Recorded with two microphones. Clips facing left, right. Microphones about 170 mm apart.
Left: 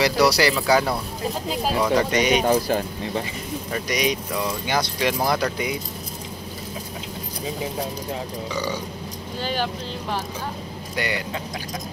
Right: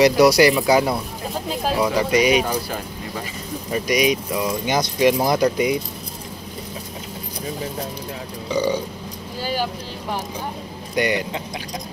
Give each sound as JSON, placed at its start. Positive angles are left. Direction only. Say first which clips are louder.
{"t": 0.0, "sound": "speech", "louder": "right 5 dB", "side_deg": -15}
{"t": 2.4, "sound": "speech", "louder": "left 5 dB", "side_deg": 30}
{"t": 3.7, "sound": "speech", "louder": "right 5 dB", "side_deg": -10}
{"t": 8.5, "sound": "speech", "louder": "right 10 dB", "side_deg": -20}
{"t": 11.0, "sound": "speech", "louder": "right 6 dB", "side_deg": -20}